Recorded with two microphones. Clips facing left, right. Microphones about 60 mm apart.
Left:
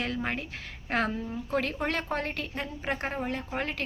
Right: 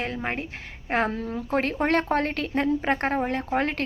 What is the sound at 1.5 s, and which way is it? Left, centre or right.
A woman's voice, right.